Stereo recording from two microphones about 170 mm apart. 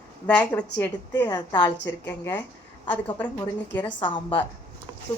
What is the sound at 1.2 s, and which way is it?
Speech, 25° left (ahead or behind).